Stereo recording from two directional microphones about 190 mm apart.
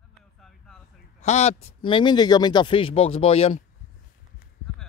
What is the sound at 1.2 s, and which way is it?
A man's voice, 35° left (ahead or behind).